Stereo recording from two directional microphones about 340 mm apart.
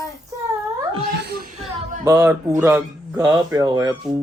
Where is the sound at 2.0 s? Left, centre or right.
Centre.